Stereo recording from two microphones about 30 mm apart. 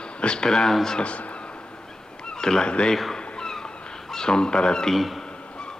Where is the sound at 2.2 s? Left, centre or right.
Left.